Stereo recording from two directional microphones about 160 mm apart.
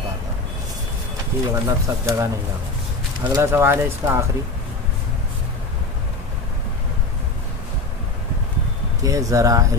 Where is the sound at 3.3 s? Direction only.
15° right (ahead or behind).